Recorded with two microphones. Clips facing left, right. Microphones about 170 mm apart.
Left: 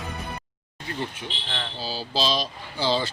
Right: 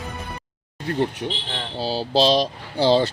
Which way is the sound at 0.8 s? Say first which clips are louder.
Right 9 dB; 60° right (ahead or behind).